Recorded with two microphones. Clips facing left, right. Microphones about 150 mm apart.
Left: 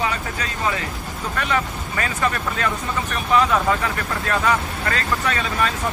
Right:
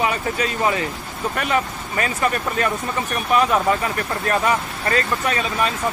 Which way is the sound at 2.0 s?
25° right (ahead or behind).